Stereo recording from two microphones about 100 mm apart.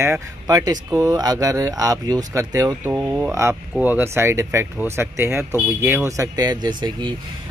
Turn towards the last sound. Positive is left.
turn(degrees=-45)  # may be behind; listen again after turning